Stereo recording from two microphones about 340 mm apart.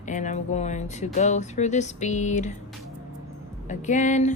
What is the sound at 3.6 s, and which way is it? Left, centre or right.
Speech, left.